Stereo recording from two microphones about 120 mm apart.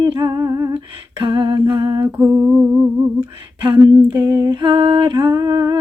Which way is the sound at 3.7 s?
35° right (ahead or behind).